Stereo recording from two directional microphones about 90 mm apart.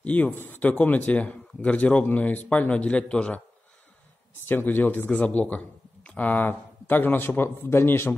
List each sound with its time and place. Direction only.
0.0 s speech: 20° left (ahead or behind)
4.5 s a man's voice: 20° left (ahead or behind)